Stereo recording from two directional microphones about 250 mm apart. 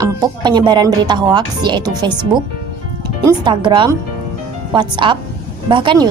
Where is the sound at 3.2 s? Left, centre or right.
Centre.